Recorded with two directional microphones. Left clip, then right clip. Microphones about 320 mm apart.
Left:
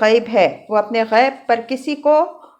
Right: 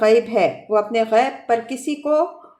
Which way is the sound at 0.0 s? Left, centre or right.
Centre.